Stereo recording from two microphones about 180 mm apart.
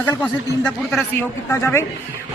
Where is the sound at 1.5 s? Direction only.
15° left (ahead or behind).